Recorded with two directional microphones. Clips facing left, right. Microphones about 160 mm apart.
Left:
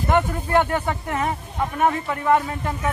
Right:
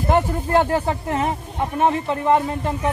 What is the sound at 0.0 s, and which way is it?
Speech, 30° right (ahead or behind).